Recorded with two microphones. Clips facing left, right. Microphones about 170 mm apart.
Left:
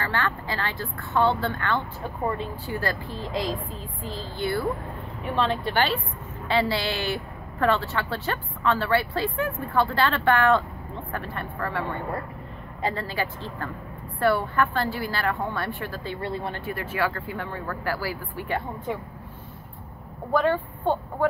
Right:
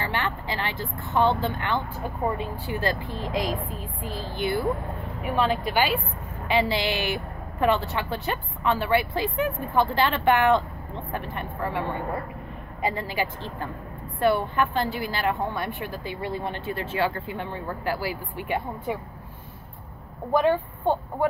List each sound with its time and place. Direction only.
0.0 s a woman's voice: 20° right (ahead or behind)
12.8 s a woman's voice: 15° right (ahead or behind)
20.3 s speech: 15° right (ahead or behind)